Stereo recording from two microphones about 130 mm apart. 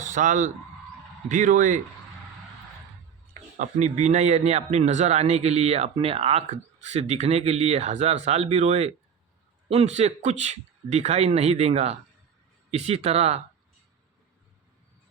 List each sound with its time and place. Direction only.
0.0 s speech: 70° right (ahead or behind)
3.6 s a man's voice: 65° right (ahead or behind)